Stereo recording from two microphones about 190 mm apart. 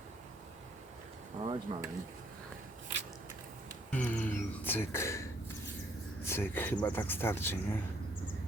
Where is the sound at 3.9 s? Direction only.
10° left (ahead or behind).